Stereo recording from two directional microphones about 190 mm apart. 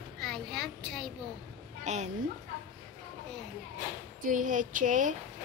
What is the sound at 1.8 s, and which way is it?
Speech, 40° right (ahead or behind).